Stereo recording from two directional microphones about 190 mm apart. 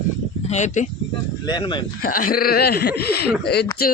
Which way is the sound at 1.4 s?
25° left (ahead or behind).